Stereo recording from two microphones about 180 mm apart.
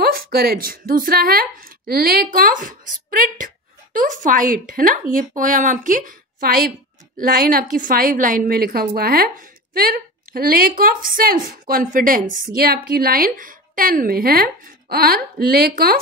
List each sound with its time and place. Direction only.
0.0 s a woman's voice: 55° right (ahead or behind)